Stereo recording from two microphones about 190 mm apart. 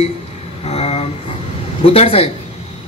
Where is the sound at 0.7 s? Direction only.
35° left (ahead or behind).